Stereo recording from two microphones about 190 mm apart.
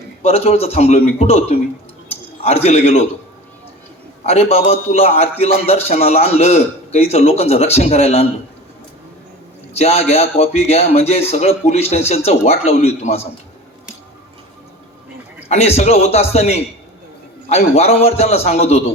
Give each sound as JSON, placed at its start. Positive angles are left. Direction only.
{"t": 0.2, "sound": "a man's voice", "side_deg": 35}
{"t": 4.3, "sound": "a man's voice", "side_deg": 30}
{"t": 9.7, "sound": "a man's voice", "side_deg": 35}
{"t": 15.4, "sound": "a man's voice", "side_deg": 35}